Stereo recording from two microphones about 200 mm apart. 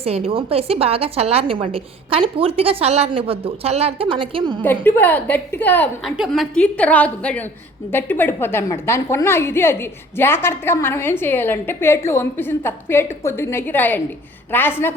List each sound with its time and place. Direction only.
0.0 s a woman's voice: 30° right (ahead or behind)
4.6 s a woman's voice: 10° left (ahead or behind)